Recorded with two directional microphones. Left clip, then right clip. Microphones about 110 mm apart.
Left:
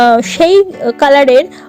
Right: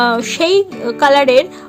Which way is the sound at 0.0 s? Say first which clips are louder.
Left 6 dB; 35° left (ahead or behind).